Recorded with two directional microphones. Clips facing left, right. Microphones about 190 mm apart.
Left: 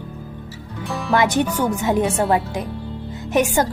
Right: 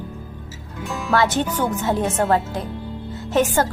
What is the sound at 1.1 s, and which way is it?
A woman's voice, 15° left (ahead or behind).